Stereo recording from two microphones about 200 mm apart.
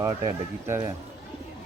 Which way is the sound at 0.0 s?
20° right (ahead or behind).